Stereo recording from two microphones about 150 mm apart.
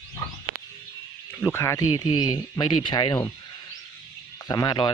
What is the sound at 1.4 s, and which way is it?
Speech, 20° left (ahead or behind).